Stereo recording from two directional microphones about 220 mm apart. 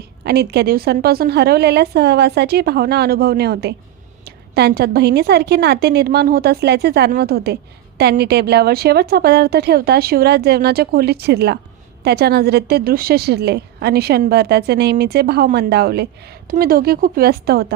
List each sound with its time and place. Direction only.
0.3 s a woman's voice: 45° right (ahead or behind)